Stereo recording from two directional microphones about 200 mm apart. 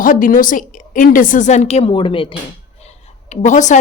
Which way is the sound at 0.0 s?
45° left (ahead or behind).